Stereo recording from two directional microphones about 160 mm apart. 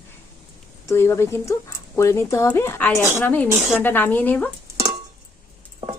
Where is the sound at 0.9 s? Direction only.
15° left (ahead or behind).